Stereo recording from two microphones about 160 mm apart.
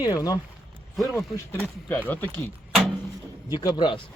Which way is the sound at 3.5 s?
25° left (ahead or behind).